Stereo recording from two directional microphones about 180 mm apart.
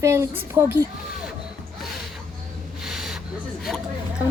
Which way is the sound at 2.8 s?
Centre (ahead or behind).